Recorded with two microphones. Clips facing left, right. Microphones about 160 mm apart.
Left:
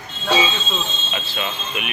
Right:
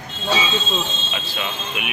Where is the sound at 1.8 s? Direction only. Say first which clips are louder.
Left 1 dB; 10° right (ahead or behind).